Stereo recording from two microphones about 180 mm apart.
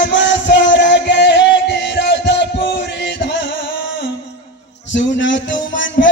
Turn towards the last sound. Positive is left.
turn(degrees=90)